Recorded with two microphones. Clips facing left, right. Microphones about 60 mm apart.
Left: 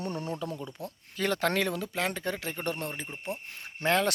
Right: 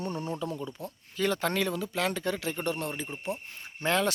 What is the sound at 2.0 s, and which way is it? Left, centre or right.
Speech, left.